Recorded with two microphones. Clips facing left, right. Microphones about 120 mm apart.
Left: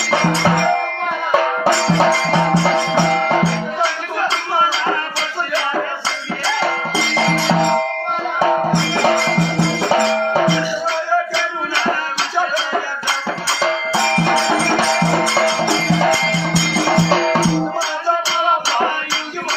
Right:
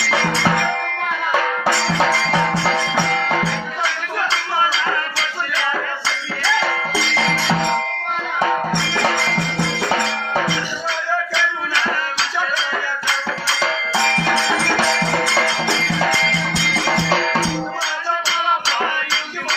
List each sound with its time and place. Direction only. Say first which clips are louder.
0.3 s music: left 3 dB; 30° left (ahead or behind)
1.9 s music: left 3 dB; 30° left (ahead or behind)
6.4 s music: left 1 dB; 30° left (ahead or behind)
8.8 s music: left 4 dB; 35° left (ahead or behind)